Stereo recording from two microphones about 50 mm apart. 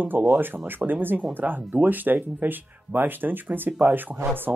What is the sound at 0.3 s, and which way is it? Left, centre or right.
Speech, right.